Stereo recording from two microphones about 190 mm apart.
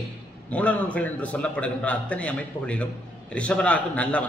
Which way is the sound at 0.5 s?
5° left (ahead or behind).